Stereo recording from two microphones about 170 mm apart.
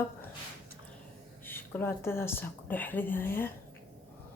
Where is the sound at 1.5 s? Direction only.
10° left (ahead or behind).